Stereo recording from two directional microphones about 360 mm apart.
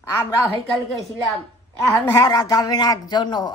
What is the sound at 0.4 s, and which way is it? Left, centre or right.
A woman's voice, centre.